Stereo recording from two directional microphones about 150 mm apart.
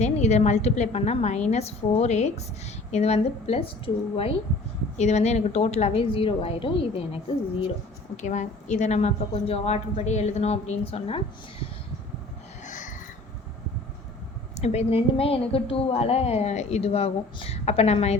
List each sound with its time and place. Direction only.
0.0 s a woman's voice: 50° left (ahead or behind)
8.1 s a woman's voice: 50° left (ahead or behind)
12.6 s a sound: 55° left (ahead or behind)
14.5 s a woman's voice: 45° left (ahead or behind)